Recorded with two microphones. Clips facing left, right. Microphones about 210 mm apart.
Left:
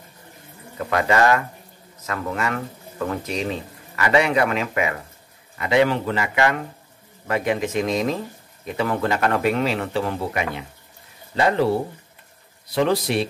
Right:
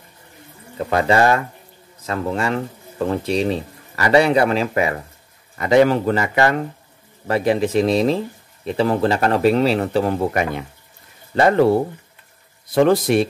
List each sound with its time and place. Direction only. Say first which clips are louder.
0.7 s speech: right 3 dB; 30° right (ahead or behind); by 11.7 s 50° right (ahead or behind)
12.7 s speech: right 6 dB; 50° right (ahead or behind)